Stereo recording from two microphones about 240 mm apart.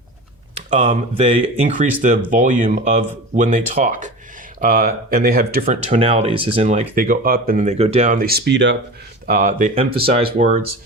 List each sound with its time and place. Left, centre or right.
0.7 s speech: right
5.9 s speech: right
9.2 s speech: right